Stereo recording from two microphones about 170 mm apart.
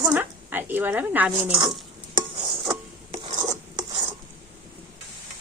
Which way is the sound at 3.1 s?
35° right (ahead or behind).